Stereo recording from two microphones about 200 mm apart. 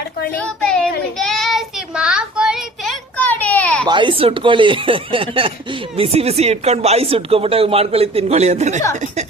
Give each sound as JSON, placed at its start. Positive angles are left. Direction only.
{"t": 0.3, "sound": "a child's voice", "side_deg": 5}
{"t": 1.2, "sound": "child singing", "side_deg": 0}
{"t": 3.8, "sound": "speech", "side_deg": -25}